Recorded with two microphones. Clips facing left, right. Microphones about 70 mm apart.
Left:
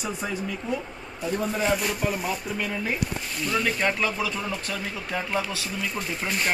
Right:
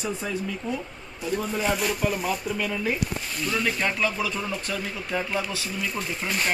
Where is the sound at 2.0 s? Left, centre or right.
Centre.